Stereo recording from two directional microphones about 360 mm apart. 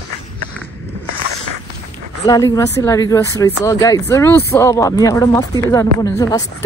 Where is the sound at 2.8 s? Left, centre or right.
Centre.